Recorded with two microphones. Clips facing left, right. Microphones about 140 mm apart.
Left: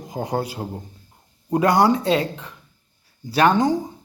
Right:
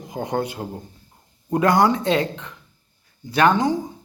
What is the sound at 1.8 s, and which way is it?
Speech, 35° left (ahead or behind).